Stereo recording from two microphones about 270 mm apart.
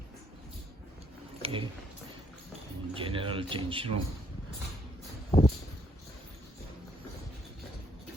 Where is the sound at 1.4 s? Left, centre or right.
Centre.